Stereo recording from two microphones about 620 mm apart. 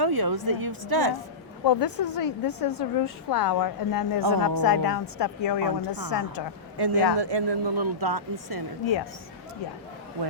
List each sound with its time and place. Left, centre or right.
0.0 s speech: right
1.6 s a woman's voice: left
6.7 s speech: right